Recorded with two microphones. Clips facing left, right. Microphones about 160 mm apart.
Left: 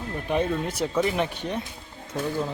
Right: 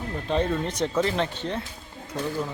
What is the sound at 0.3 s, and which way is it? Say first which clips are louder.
Speech: even; 10° left (ahead or behind).